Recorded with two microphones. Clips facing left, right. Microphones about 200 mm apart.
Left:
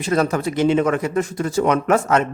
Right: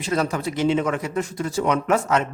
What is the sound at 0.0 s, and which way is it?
Speech, 50° left (ahead or behind).